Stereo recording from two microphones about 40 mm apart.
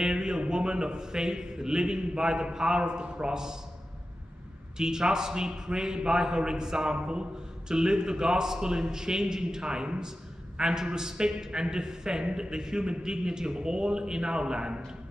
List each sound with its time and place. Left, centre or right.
0.0 s a man's voice: centre
4.7 s a man's voice: centre